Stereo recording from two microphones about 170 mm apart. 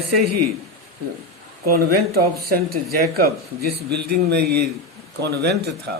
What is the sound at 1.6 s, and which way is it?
Speech, 60° right (ahead or behind).